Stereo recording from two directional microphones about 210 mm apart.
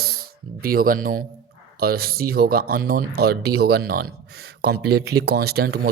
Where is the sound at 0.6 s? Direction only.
45° right (ahead or behind).